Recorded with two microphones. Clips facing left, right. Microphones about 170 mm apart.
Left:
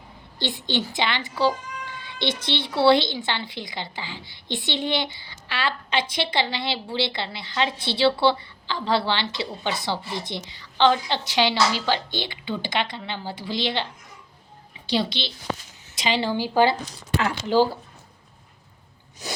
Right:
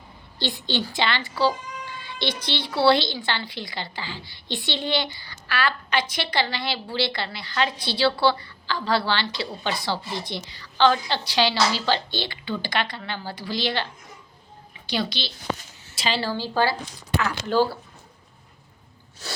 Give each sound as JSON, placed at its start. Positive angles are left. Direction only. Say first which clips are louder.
{"t": 0.3, "sound": "a woman's voice", "louder": "even", "side_deg": 20}
{"t": 14.8, "sound": "a woman's voice", "louder": "left 3 dB", "side_deg": 25}
{"t": 17.5, "sound": "speech", "louder": "left 2 dB", "side_deg": 15}
{"t": 19.2, "sound": "speech", "louder": "left 3 dB", "side_deg": 15}